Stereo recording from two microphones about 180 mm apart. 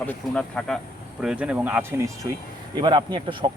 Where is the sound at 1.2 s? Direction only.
5° right (ahead or behind); by 3.5 s 25° right (ahead or behind).